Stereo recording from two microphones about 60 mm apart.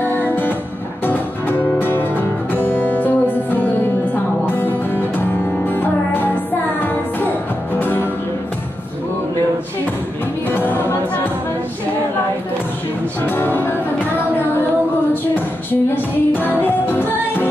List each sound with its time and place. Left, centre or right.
1.0 s music: left
10.5 s music: left
13.2 s music: left
15.7 s music: left